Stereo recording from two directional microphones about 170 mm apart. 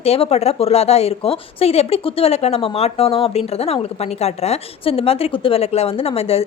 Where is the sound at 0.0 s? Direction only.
35° left (ahead or behind).